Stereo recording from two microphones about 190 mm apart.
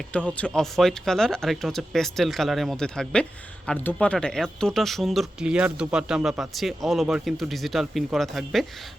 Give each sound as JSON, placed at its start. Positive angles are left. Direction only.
{"t": 0.1, "sound": "speech", "side_deg": 5}